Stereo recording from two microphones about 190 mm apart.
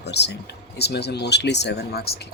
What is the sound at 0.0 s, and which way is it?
Speech, 60° left (ahead or behind).